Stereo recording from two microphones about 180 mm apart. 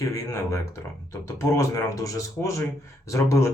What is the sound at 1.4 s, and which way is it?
Speech, 15° left (ahead or behind).